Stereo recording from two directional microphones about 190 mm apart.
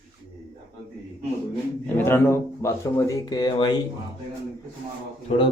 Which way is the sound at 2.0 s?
15° left (ahead or behind).